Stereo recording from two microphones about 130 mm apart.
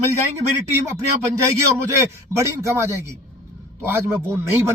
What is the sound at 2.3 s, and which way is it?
Speech, 20° right (ahead or behind).